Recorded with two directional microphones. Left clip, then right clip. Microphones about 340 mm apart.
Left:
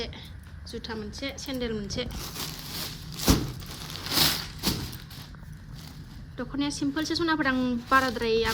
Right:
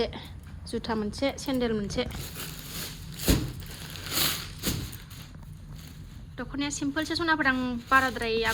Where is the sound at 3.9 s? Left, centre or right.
Left.